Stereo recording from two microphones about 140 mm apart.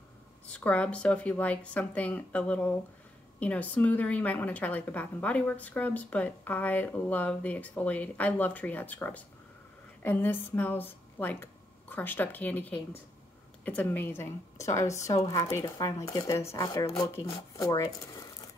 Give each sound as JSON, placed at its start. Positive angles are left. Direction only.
{"t": 0.5, "sound": "a woman's voice", "side_deg": 10}